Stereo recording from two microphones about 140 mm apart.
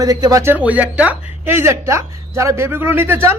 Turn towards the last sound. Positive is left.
turn(degrees=-15)  # may be behind; listen again after turning